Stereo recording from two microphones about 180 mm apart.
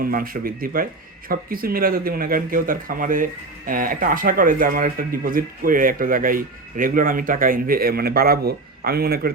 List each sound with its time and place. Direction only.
0.0 s speech: 55° right (ahead or behind)